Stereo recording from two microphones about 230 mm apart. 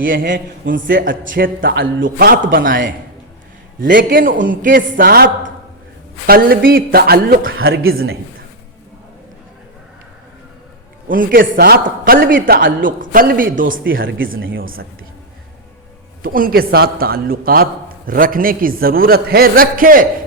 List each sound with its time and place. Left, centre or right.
0.0 s a man's voice: right
3.8 s a man's voice: right
7.8 s a woman's voice: right
11.1 s a man's voice: right
16.2 s a man's voice: right